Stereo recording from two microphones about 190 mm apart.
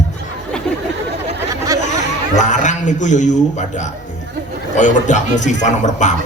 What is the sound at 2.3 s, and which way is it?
A man's voice, 40° left (ahead or behind).